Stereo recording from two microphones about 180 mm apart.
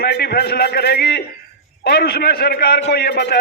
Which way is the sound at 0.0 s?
65° left (ahead or behind).